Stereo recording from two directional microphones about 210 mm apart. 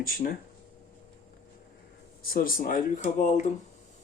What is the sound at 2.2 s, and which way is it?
Speech, 45° left (ahead or behind).